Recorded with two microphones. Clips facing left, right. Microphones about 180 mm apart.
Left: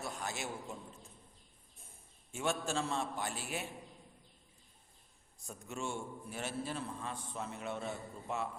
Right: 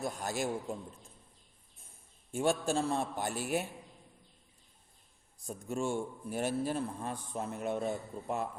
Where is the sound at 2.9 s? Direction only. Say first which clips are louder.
Right 4 dB; 55° right (ahead or behind).